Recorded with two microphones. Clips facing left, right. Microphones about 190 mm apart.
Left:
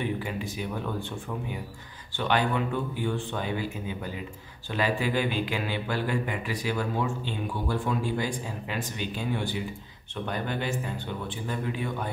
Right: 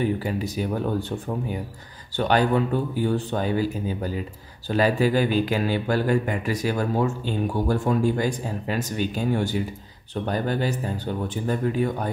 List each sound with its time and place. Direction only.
0.0 s speech: 40° right (ahead or behind)
2.1 s speech: 40° right (ahead or behind)